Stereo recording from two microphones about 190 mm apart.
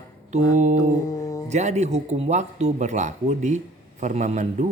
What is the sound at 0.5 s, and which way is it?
Speech, 40° right (ahead or behind).